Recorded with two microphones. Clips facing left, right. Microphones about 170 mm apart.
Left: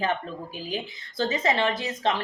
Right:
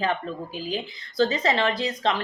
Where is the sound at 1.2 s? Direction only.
20° left (ahead or behind).